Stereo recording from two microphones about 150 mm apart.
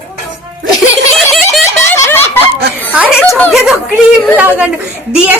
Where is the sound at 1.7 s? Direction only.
15° left (ahead or behind).